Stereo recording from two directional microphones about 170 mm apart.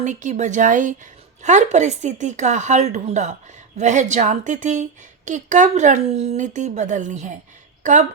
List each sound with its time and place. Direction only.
0.0 s a woman's voice: 45° right (ahead or behind)